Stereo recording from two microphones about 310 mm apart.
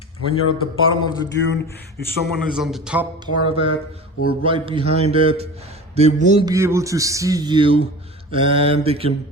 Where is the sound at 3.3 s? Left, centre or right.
Centre.